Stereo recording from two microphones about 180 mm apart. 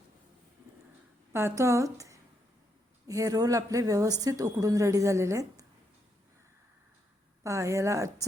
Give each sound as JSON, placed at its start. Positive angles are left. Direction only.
{"t": 1.3, "sound": "a woman's voice", "side_deg": -15}
{"t": 7.4, "sound": "a woman's voice", "side_deg": -15}